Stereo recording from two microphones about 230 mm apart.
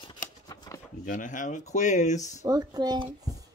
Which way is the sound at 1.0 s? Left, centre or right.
Left.